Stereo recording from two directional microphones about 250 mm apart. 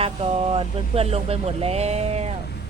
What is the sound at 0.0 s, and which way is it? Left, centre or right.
Speech, right.